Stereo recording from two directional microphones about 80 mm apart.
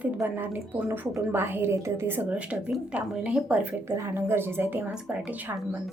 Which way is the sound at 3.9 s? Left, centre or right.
Right.